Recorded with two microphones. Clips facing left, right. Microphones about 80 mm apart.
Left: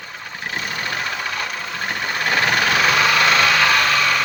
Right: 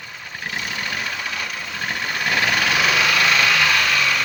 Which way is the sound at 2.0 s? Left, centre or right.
Left.